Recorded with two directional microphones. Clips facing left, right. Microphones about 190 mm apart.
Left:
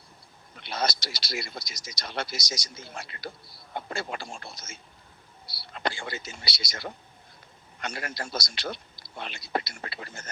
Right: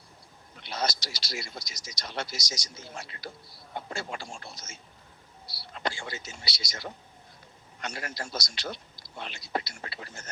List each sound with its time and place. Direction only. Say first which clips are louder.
0.6 s speech: left 2 dB; 60° left (ahead or behind)
5.7 s speech: left 2 dB; 60° left (ahead or behind)